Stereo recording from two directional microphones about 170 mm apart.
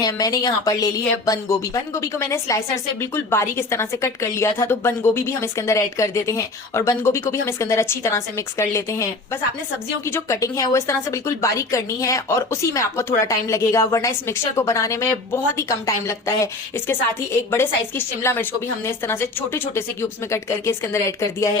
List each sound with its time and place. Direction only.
0.0 s a woman's voice: 20° left (ahead or behind)